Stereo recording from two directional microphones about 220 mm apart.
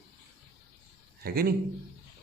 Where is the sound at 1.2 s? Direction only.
45° right (ahead or behind).